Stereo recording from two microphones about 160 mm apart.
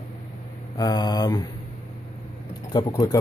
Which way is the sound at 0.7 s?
25° left (ahead or behind).